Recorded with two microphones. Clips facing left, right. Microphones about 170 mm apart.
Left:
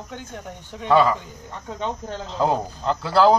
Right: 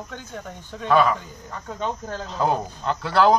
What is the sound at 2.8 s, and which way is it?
Speech, 30° left (ahead or behind).